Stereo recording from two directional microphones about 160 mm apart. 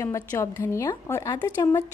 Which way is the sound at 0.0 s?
20° left (ahead or behind).